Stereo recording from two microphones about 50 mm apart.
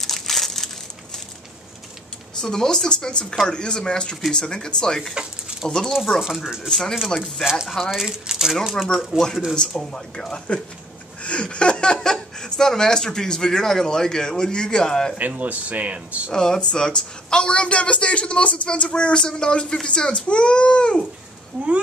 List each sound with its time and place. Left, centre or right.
0.0 s crushing: centre
2.4 s speech: centre
6.2 s speech: centre
6.7 s speech: centre
9.6 s speech: centre
15.1 s speech: right
16.3 s a woman's voice: centre